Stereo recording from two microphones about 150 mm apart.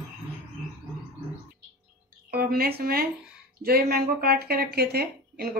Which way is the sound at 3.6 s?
90° right.